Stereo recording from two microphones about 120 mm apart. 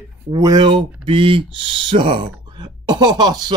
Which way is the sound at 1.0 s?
50° right (ahead or behind).